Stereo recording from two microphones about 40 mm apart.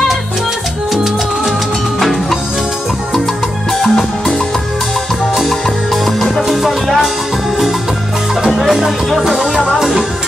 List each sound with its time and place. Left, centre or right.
3.8 s music: centre
6.4 s music: centre
8.5 s music: centre